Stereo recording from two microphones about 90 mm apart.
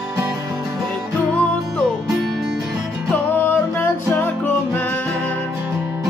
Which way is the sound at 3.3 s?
25° left (ahead or behind).